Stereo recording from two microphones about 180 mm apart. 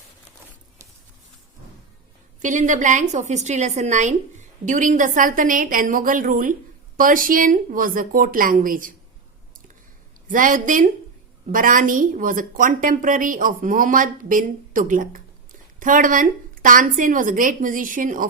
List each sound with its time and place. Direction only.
2.4 s a woman's voice: 45° right (ahead or behind)
10.2 s a woman's voice: 50° right (ahead or behind)